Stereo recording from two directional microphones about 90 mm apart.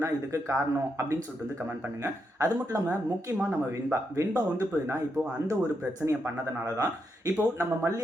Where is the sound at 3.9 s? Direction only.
35° right (ahead or behind).